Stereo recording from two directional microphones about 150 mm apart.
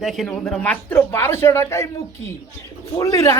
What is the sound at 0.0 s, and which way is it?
Speech, centre (ahead or behind).